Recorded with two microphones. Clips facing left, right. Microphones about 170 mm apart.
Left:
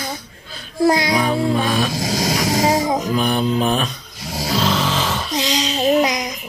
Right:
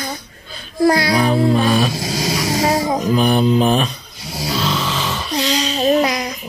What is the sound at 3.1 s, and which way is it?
Music, centre (ahead or behind).